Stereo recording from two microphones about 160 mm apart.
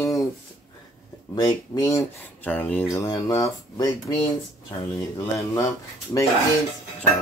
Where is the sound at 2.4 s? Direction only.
10° left (ahead or behind).